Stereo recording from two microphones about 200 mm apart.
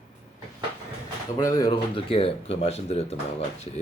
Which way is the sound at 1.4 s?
15° left (ahead or behind).